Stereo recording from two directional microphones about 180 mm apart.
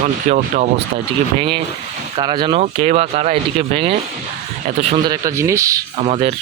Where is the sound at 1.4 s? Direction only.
30° right (ahead or behind).